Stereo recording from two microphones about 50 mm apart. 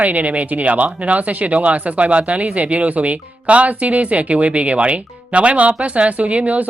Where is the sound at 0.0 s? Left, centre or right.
Right.